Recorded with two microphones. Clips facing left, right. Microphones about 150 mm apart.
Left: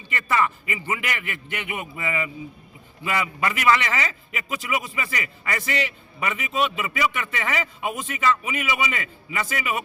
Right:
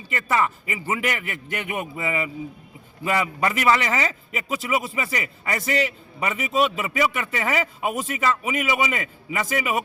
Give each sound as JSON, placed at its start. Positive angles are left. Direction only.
{"t": 0.1, "sound": "a man's voice", "side_deg": -35}